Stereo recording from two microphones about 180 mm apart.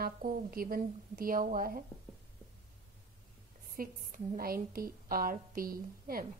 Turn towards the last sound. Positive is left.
turn(degrees=-55)  # may be behind; listen again after turning